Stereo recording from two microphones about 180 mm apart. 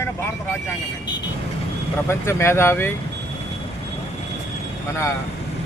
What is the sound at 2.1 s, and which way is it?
Speech, 15° left (ahead or behind).